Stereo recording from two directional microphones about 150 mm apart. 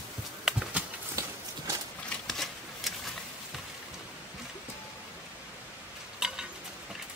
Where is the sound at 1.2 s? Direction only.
20° right (ahead or behind).